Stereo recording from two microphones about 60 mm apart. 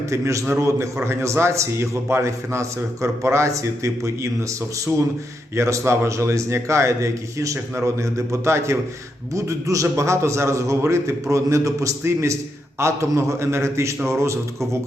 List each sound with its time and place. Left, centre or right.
0.1 s a man's voice: right
5.5 s a man's voice: right
9.3 s a man's voice: right